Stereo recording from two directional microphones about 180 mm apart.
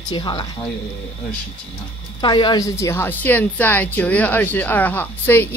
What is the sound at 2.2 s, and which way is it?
A woman's voice, 25° left (ahead or behind).